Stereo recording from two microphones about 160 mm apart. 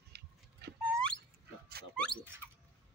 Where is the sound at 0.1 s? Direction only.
90° right.